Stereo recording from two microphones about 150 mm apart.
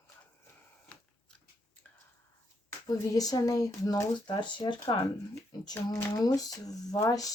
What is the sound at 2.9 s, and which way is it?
Speech, 25° left (ahead or behind).